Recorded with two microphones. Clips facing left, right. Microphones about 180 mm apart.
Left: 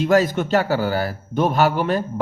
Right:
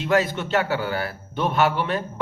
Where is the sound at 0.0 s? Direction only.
40° left (ahead or behind).